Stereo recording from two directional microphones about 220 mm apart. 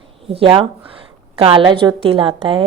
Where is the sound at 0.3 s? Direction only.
25° right (ahead or behind).